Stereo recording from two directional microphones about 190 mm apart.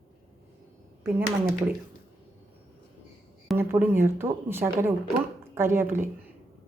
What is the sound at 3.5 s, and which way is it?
Speech, 10° right (ahead or behind).